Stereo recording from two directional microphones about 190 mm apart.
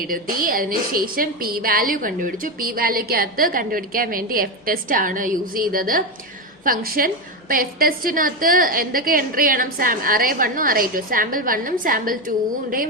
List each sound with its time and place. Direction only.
0.1 s a woman's voice: 50° right (ahead or behind)